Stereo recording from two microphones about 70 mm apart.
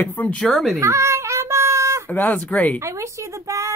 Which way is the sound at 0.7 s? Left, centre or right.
Right.